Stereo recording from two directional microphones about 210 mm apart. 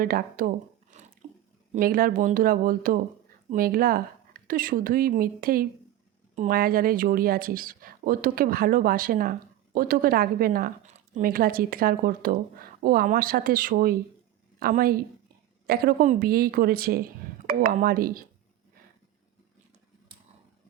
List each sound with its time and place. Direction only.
0.0 s speech: 45° right (ahead or behind)
0.9 s a sound: 35° right (ahead or behind)
1.7 s speech: 40° right (ahead or behind)